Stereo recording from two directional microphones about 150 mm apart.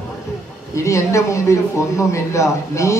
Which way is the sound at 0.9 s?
20° left (ahead or behind).